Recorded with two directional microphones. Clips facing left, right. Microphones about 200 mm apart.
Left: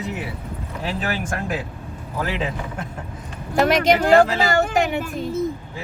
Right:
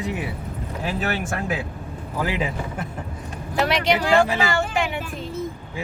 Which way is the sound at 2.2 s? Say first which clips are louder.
Even; 10° right (ahead or behind).